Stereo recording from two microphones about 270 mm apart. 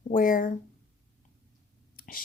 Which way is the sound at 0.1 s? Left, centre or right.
Left.